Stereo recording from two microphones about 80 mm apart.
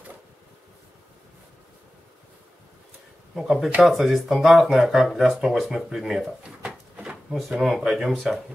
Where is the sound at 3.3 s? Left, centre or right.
Centre.